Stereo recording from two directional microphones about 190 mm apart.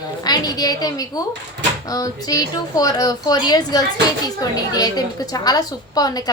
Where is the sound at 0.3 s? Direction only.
20° left (ahead or behind).